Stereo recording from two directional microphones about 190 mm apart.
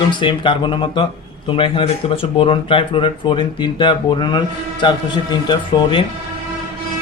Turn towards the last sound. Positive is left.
turn(degrees=25)  # may be behind; listen again after turning